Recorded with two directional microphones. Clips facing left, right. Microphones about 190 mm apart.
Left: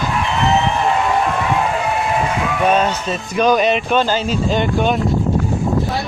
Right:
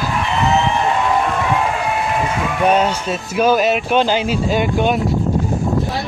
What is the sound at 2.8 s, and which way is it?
Speech, 10° right (ahead or behind).